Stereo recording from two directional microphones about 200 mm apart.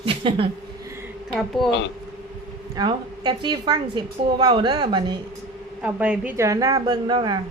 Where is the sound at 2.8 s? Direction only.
20° right (ahead or behind).